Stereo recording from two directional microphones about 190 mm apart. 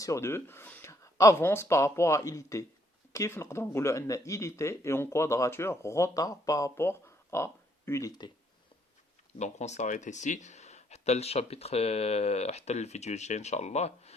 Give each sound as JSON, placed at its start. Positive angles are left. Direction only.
{"t": 0.0, "sound": "speech", "side_deg": 15}
{"t": 9.4, "sound": "speech", "side_deg": 35}